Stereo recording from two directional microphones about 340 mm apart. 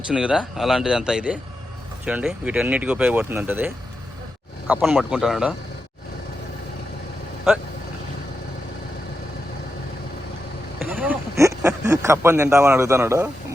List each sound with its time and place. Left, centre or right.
0.1 s speech: centre
4.7 s speech: centre
10.8 s a sound: centre